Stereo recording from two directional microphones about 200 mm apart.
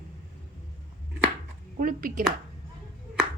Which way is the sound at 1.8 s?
45° right (ahead or behind).